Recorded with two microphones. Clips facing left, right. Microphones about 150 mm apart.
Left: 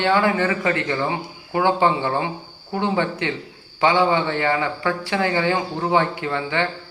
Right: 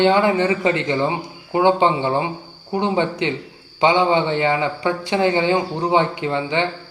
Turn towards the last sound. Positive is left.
turn(degrees=-20)  # may be behind; listen again after turning